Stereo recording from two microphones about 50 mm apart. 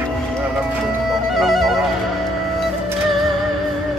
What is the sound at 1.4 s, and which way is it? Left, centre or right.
Music, centre.